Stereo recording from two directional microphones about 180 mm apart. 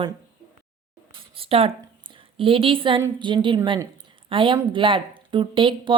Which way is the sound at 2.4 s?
30° right (ahead or behind).